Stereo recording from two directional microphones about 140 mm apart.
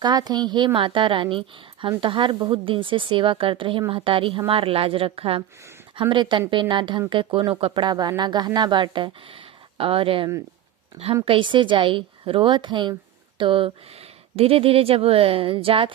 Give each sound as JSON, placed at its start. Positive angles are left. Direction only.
{"t": 0.0, "sound": "speech", "side_deg": -30}